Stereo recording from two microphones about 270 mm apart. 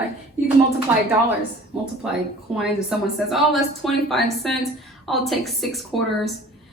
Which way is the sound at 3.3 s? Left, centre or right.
Centre.